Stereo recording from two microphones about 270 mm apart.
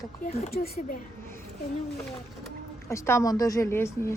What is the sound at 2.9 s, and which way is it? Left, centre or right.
A woman's voice, centre.